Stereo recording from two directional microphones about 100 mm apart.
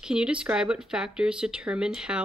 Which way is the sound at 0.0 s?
10° right (ahead or behind).